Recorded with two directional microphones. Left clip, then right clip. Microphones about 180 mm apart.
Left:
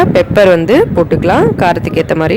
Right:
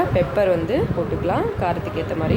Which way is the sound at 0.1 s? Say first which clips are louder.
Left 11 dB; 50° left (ahead or behind).